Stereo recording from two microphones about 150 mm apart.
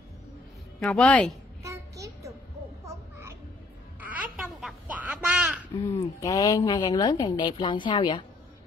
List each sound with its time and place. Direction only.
0.7 s speech: 5° left (ahead or behind)
1.6 s child singing: 20° right (ahead or behind)
2.8 s a sound: 20° right (ahead or behind)
5.9 s a woman's voice: 20° left (ahead or behind)